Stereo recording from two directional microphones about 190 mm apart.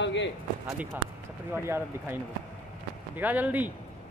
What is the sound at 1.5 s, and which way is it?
Speech, 15° right (ahead or behind).